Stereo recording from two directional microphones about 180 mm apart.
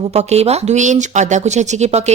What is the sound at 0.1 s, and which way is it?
Speech, 35° right (ahead or behind).